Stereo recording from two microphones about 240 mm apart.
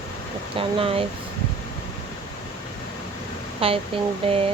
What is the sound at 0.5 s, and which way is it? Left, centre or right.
Speech, right.